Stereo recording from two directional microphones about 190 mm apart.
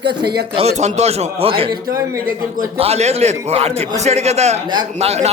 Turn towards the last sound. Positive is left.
turn(degrees=-35)  # may be behind; listen again after turning